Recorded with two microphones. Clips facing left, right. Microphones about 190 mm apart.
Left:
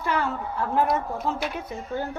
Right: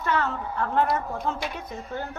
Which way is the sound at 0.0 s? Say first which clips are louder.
Even; 10° left (ahead or behind).